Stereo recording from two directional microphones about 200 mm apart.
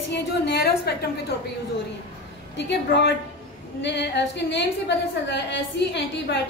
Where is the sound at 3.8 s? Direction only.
60° left (ahead or behind).